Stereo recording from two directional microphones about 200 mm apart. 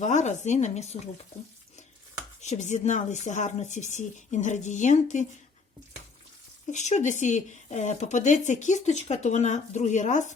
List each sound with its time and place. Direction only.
0.0 s speech: 35° left (ahead or behind)
2.4 s speech: 35° left (ahead or behind)
6.7 s speech: 35° left (ahead or behind)